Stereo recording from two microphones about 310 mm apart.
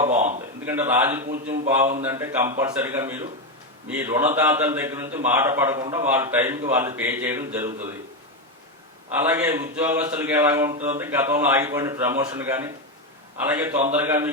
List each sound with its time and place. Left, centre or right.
0.6 s a man's voice: centre
1.3 s speech: right
2.0 s a man's voice: centre
5.8 s speech: centre
6.1 s a man's voice: centre
9.2 s a man's voice: centre